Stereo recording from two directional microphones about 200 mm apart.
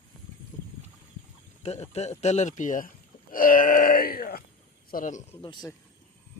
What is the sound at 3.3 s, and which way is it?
Wail, 45° left (ahead or behind).